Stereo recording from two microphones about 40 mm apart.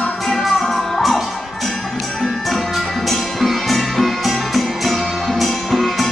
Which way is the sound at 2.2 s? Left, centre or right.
Centre.